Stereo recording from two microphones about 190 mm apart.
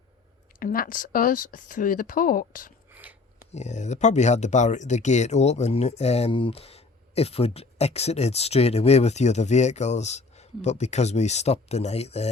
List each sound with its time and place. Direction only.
0.6 s speech: 50° left (ahead or behind)
2.9 s a sound: 10° right (ahead or behind)
3.5 s speech: 35° left (ahead or behind)